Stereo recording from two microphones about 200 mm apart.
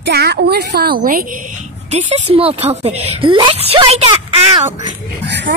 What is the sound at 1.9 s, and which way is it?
A woman's voice, 35° right (ahead or behind).